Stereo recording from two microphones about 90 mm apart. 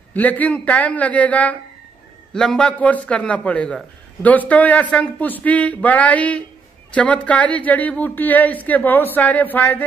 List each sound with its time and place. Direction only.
0.1 s a woman's voice: 20° left (ahead or behind)